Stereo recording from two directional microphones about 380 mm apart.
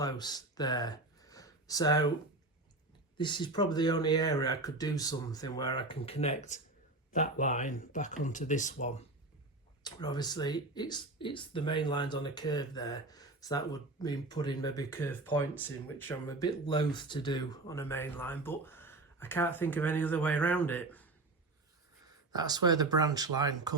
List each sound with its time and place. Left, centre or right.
0.0 s speech: centre
3.2 s speech: centre
22.3 s speech: centre